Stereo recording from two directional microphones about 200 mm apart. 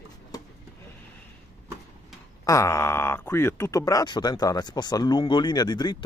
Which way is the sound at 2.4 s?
15° left (ahead or behind).